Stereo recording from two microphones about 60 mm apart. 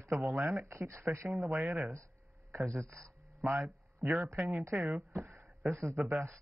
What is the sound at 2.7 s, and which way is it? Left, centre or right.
Speech, right.